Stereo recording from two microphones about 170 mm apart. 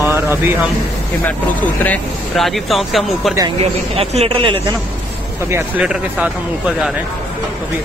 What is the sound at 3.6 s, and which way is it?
Speech, 35° right (ahead or behind).